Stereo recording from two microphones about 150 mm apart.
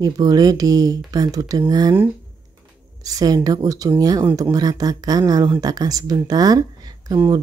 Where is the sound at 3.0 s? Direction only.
25° right (ahead or behind).